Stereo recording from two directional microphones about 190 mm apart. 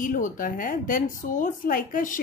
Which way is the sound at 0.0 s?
45° left (ahead or behind).